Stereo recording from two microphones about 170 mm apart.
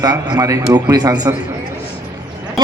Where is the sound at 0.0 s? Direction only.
20° right (ahead or behind).